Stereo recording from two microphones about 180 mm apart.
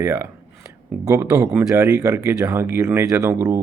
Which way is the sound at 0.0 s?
15° right (ahead or behind).